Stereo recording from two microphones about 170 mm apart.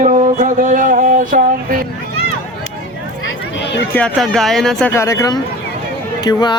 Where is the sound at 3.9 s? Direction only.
5° left (ahead or behind).